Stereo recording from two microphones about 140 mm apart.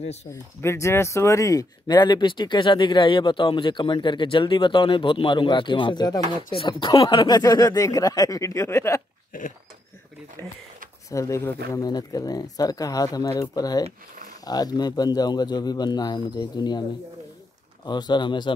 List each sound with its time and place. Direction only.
0.0 s speech: 50° left (ahead or behind)
0.3 s speech: 20° left (ahead or behind)
9.3 s a sound: 75° left (ahead or behind)
11.1 s speech: 20° left (ahead or behind)
17.8 s speech: 30° left (ahead or behind)